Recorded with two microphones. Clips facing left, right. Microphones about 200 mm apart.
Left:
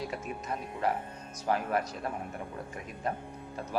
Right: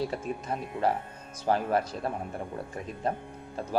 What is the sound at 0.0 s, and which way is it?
Speech, 30° right (ahead or behind).